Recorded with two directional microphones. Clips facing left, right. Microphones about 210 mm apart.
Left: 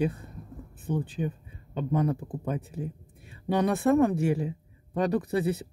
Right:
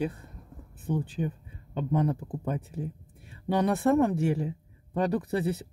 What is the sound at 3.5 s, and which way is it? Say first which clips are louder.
Speech: left 1 dB; 15° left (ahead or behind).